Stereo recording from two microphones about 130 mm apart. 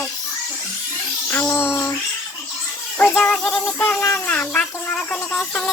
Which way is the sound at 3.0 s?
10° left (ahead or behind).